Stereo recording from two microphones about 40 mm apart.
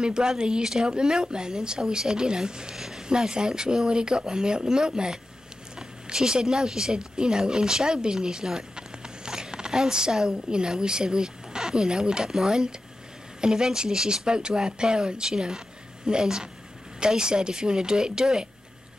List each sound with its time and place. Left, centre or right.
0.0 s speech: centre
2.7 s a sound: centre
3.1 s speech: centre